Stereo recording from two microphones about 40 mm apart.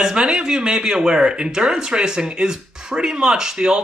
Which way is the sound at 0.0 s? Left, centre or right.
Centre.